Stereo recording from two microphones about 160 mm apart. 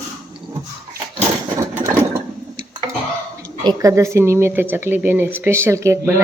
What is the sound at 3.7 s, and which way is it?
Speech, 20° right (ahead or behind).